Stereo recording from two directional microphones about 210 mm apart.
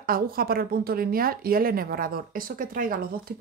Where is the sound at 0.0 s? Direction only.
45° right (ahead or behind).